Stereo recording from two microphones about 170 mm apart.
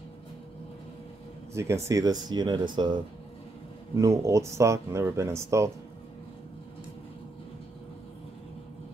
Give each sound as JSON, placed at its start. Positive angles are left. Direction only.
{"t": 1.5, "sound": "speech", "side_deg": -15}